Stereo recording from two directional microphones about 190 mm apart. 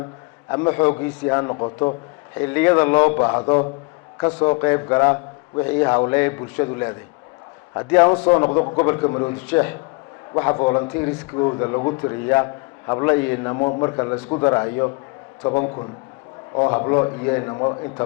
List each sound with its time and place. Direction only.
0.5 s a man's voice: 20° left (ahead or behind)
2.4 s a man's voice: 10° left (ahead or behind); by 4.6 s 30° left (ahead or behind)
4.6 s a man's voice: 15° left (ahead or behind)
9.5 s a man's voice: 15° left (ahead or behind); by 12.1 s 30° left (ahead or behind)
12.9 s a man's voice: 15° left (ahead or behind)
13.6 s a man's voice: 25° left (ahead or behind)